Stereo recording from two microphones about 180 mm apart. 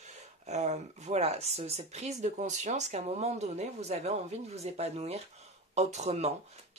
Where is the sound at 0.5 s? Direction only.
40° right (ahead or behind).